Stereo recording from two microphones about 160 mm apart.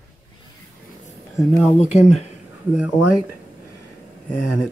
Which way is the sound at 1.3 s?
Centre (ahead or behind).